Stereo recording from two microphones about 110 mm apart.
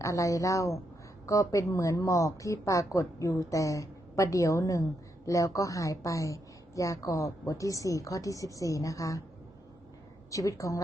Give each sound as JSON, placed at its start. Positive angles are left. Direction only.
{"t": 0.0, "sound": "speech", "side_deg": 30}
{"t": 10.3, "sound": "speech", "side_deg": 30}